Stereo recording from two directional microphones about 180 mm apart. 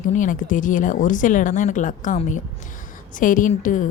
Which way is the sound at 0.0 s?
45° left (ahead or behind).